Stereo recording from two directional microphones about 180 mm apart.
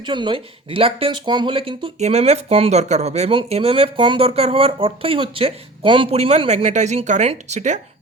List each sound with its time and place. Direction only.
0.0 s speech: 25° right (ahead or behind)